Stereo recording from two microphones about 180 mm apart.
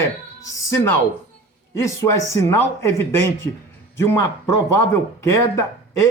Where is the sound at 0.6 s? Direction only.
15° left (ahead or behind).